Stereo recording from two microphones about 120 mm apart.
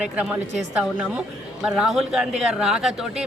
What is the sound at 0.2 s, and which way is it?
Speech, 10° right (ahead or behind).